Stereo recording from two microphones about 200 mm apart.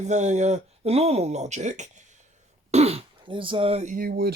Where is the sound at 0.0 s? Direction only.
35° right (ahead or behind).